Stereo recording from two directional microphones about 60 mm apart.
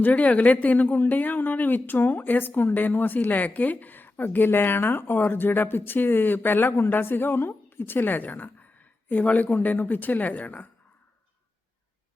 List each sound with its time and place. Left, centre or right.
0.0 s speech: left